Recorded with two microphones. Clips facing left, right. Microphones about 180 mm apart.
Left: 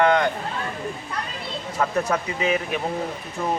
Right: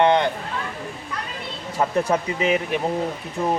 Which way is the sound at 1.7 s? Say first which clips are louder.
Right 2 dB; 30° right (ahead or behind).